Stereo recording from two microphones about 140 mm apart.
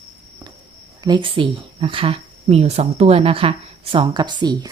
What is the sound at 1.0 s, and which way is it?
Speech, 35° right (ahead or behind).